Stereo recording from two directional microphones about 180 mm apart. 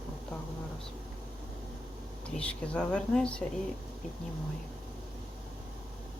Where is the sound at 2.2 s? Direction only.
5° left (ahead or behind).